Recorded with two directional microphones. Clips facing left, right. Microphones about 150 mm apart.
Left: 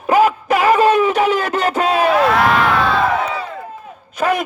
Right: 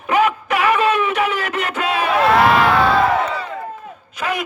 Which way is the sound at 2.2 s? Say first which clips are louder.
Right 1 dB; centre (ahead or behind).